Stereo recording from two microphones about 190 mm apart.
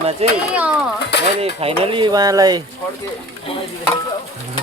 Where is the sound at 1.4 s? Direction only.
30° right (ahead or behind).